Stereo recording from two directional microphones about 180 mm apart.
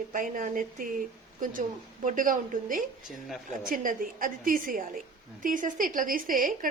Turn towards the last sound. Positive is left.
turn(degrees=-50)  # may be behind; listen again after turning